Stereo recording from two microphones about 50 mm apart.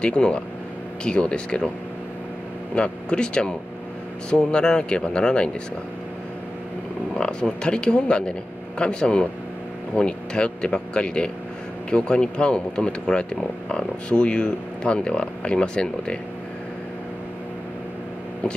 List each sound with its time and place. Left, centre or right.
0.0 s speech: left
2.7 s speech: left
7.2 s speech: centre